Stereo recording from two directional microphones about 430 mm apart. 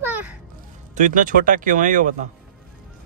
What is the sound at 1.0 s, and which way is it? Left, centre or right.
Speech, centre.